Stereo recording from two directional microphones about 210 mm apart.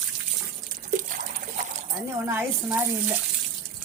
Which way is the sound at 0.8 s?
35° right (ahead or behind).